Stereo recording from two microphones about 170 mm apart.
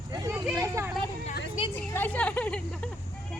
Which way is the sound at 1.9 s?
10° left (ahead or behind).